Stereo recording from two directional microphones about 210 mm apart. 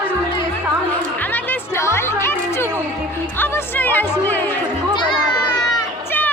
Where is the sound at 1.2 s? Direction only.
10° left (ahead or behind).